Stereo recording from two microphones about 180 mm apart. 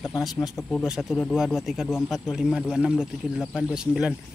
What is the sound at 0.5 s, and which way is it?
Speech, 15° left (ahead or behind).